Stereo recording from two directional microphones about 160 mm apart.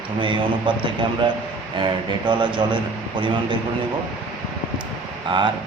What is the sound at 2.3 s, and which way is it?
Speech, 30° right (ahead or behind).